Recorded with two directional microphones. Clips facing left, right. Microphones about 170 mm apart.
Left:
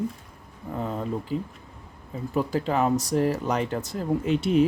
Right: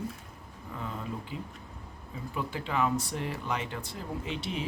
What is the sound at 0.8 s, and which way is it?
Speech, 40° left (ahead or behind).